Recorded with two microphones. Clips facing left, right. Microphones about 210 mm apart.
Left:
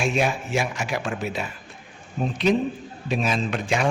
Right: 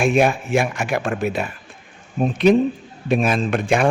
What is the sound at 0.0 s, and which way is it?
A man's voice, 55° right (ahead or behind).